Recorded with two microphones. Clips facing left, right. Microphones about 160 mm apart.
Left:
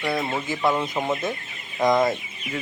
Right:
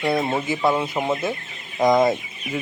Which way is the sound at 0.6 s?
10° right (ahead or behind).